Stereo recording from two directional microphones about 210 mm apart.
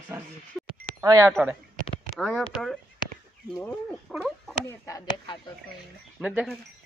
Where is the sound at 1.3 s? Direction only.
5° right (ahead or behind).